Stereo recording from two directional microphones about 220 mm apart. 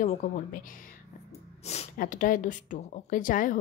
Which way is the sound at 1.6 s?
30° left (ahead or behind).